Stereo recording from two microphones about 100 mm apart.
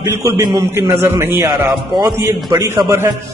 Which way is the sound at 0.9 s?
40° right (ahead or behind).